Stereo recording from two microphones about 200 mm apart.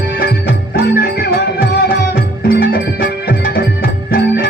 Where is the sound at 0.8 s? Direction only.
55° left (ahead or behind).